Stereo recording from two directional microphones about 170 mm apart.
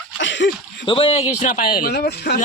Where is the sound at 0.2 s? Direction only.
90° left.